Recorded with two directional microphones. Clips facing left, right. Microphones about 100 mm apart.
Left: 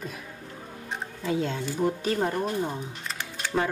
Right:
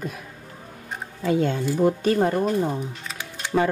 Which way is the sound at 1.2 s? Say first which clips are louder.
Right 6 dB; 60° right (ahead or behind).